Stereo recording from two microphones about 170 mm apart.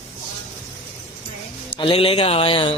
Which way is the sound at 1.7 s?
30° left (ahead or behind).